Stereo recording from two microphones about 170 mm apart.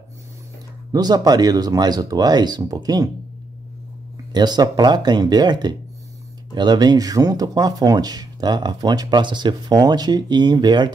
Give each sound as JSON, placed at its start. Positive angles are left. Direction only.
{"t": 0.9, "sound": "speech", "side_deg": -25}
{"t": 4.3, "sound": "speech", "side_deg": -25}